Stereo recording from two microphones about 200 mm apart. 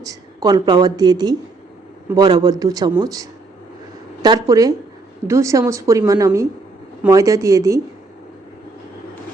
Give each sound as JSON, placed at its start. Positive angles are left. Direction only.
{"t": 0.0, "sound": "a woman's voice", "side_deg": -20}